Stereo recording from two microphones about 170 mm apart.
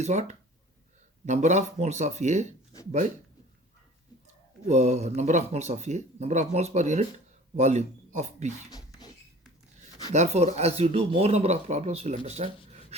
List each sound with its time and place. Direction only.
0.0 s a man's voice: 45° right (ahead or behind)
4.7 s a man's voice: 40° right (ahead or behind)
8.7 s a sound: 20° left (ahead or behind)
10.1 s speech: 40° right (ahead or behind)